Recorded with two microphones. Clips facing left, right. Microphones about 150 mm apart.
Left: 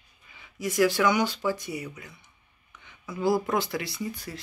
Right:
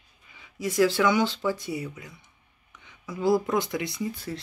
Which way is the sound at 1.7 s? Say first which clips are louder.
Right 3 dB; 25° right (ahead or behind).